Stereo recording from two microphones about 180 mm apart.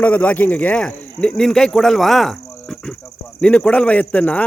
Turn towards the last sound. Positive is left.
turn(degrees=5)  # may be behind; listen again after turning